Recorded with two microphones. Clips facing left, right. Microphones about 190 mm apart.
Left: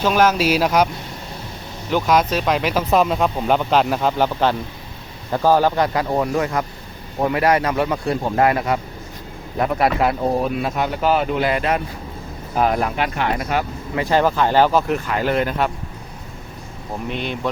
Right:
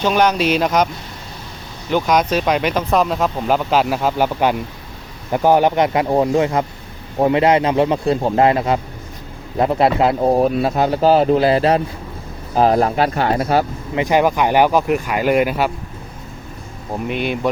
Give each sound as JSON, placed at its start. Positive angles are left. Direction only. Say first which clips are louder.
{"t": 0.0, "sound": "speech", "louder": "right 1 dB", "side_deg": 5}
{"t": 1.9, "sound": "speech", "louder": "right 1 dB", "side_deg": 0}
{"t": 10.3, "sound": "speech", "louder": "right 5 dB", "side_deg": -40}
{"t": 13.9, "sound": "speech", "louder": "right 2 dB", "side_deg": -15}
{"t": 17.1, "sound": "speech", "louder": "right 5 dB", "side_deg": -10}